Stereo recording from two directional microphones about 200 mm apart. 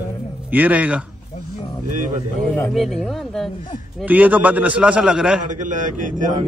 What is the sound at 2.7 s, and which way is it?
A man's voice, centre (ahead or behind).